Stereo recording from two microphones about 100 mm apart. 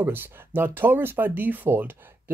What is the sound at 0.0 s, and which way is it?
Speech, 20° right (ahead or behind).